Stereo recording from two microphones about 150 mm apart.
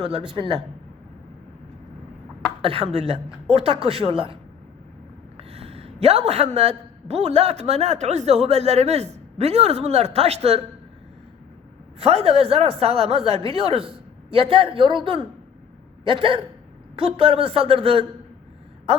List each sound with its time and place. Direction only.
0.1 s a woman's voice: 35° right (ahead or behind)
2.6 s a woman's voice: 40° right (ahead or behind)
5.4 s a man's voice: 45° right (ahead or behind)
11.9 s a woman's voice: 45° right (ahead or behind)